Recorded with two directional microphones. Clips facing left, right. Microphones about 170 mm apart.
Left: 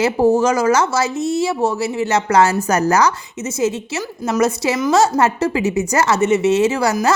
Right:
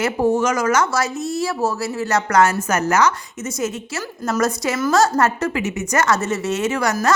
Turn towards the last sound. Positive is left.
turn(degrees=30)  # may be behind; listen again after turning